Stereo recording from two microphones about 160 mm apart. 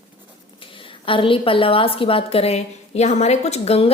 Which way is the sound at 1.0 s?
35° left (ahead or behind).